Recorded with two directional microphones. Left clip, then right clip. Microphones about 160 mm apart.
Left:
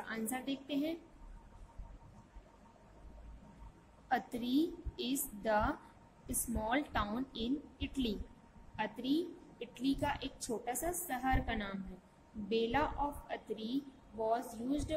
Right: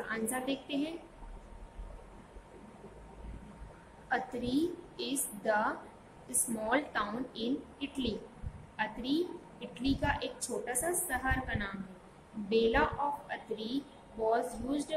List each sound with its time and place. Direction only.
0.1 s a woman's voice: 50° left (ahead or behind)
4.1 s a woman's voice: 50° left (ahead or behind)